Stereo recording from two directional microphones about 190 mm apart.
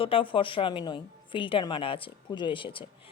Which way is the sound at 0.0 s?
30° left (ahead or behind).